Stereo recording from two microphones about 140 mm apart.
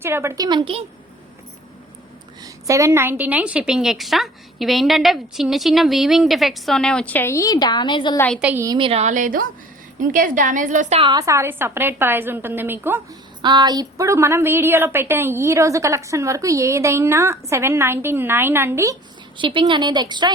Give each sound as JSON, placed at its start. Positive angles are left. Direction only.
{"t": 0.0, "sound": "a woman's voice", "side_deg": -20}
{"t": 2.4, "sound": "a woman's voice", "side_deg": -20}
{"t": 8.4, "sound": "a woman's voice", "side_deg": -10}
{"t": 8.8, "sound": "a woman's voice", "side_deg": -45}
{"t": 9.0, "sound": "a woman's voice", "side_deg": -70}
{"t": 10.9, "sound": "a woman's voice", "side_deg": -35}
{"t": 13.4, "sound": "a woman's voice", "side_deg": -30}
{"t": 19.4, "sound": "a woman's voice", "side_deg": -35}